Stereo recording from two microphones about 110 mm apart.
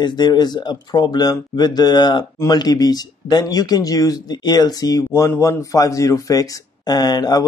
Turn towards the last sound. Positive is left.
turn(degrees=40)  # may be behind; listen again after turning